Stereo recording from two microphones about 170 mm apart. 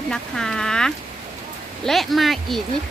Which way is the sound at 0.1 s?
5° left (ahead or behind).